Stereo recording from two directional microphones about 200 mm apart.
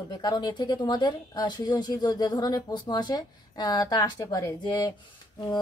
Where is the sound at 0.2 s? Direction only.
20° left (ahead or behind).